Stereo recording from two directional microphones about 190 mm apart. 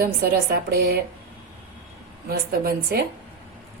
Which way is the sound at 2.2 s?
50° right (ahead or behind).